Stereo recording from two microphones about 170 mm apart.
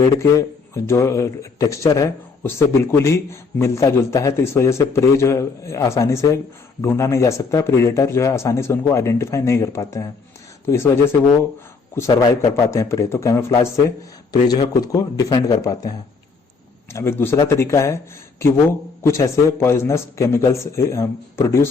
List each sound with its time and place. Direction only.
0.0 s a man's voice: 20° left (ahead or behind)
16.9 s a man's voice: 15° left (ahead or behind)